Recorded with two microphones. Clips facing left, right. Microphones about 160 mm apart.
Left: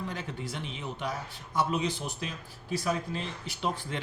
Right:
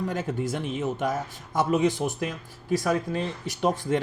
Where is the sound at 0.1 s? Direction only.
45° right (ahead or behind).